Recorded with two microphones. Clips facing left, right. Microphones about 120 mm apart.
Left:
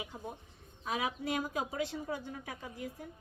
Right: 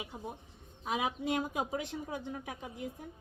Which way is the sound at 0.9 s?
20° right (ahead or behind).